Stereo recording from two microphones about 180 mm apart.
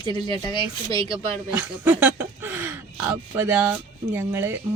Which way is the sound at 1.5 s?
10° right (ahead or behind).